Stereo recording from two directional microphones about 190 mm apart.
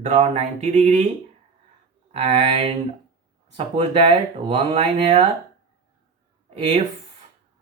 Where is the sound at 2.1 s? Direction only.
35° right (ahead or behind).